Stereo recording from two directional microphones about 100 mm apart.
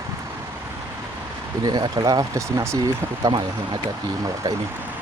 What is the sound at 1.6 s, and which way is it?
Speech, 40° right (ahead or behind).